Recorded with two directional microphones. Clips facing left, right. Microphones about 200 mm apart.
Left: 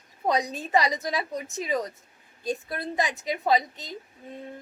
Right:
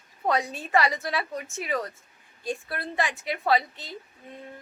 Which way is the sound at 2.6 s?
20° left (ahead or behind).